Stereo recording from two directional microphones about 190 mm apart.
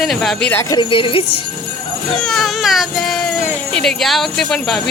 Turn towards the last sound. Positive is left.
turn(degrees=0)  # may be behind; listen again after turning